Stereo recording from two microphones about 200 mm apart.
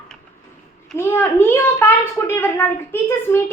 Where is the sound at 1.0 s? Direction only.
10° left (ahead or behind).